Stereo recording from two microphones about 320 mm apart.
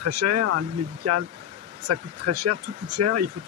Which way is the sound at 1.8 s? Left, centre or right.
Right.